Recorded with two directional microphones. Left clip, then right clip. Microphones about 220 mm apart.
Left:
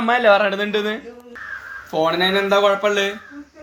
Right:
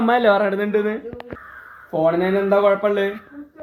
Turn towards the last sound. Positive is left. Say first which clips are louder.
# even
turn(degrees=-10)  # may be behind; listen again after turning